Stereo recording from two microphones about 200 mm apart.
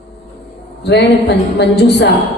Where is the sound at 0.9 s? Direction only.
60° left (ahead or behind).